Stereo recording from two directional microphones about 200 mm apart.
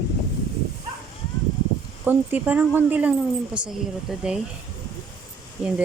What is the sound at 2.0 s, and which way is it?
Speech, 10° right (ahead or behind).